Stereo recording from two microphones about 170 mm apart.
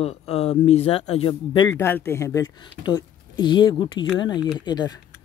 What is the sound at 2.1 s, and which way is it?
Speech, 15° left (ahead or behind).